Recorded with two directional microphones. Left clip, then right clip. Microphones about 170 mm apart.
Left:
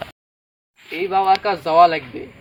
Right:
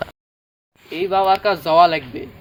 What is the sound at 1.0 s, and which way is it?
Speech, 5° right (ahead or behind).